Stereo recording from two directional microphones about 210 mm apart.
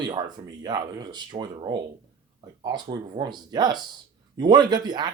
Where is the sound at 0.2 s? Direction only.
20° right (ahead or behind).